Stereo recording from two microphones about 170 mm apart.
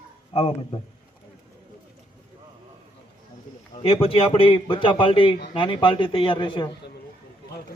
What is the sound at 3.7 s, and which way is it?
A man's voice, 35° left (ahead or behind).